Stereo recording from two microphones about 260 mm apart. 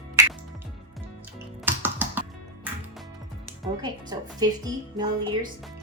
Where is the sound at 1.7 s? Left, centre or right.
Centre.